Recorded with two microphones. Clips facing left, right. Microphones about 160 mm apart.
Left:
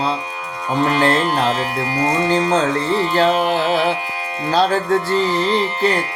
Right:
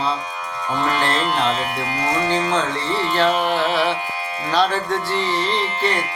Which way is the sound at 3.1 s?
40° left (ahead or behind).